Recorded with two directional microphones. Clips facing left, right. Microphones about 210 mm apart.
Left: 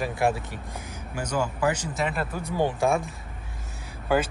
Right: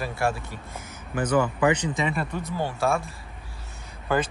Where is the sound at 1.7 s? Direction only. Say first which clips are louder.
Right 1 dB; 5° left (ahead or behind).